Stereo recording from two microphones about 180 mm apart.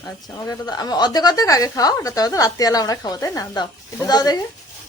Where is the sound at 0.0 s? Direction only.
20° left (ahead or behind).